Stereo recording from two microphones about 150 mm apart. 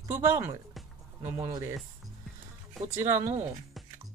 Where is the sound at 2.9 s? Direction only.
20° right (ahead or behind).